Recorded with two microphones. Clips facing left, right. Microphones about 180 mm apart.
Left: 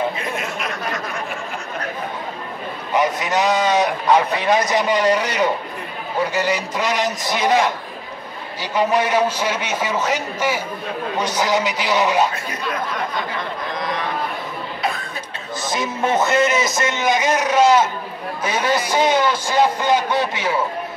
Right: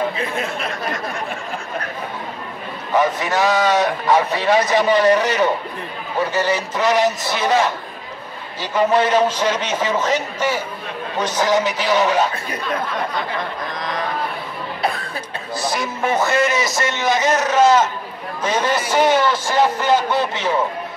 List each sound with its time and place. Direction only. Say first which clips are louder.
0.4 s a sound: right 2 dB; 30° right (ahead or behind)
2.9 s a man's voice: right 1 dB; 15° left (ahead or behind)
8.7 s a man's voice: right 2 dB; 10° left (ahead or behind)
15.7 s a man's voice: left 2 dB; 20° left (ahead or behind)